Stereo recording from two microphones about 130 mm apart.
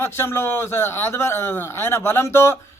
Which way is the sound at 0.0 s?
20° left (ahead or behind).